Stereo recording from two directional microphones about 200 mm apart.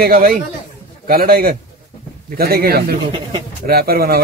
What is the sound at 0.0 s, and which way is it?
Speech, 50° right (ahead or behind).